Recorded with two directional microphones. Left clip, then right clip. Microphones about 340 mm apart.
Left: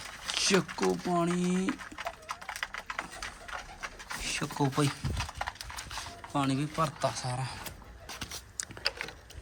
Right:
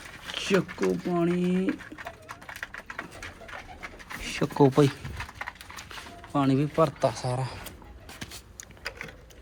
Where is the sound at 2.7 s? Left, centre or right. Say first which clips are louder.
Left 1 dB; left.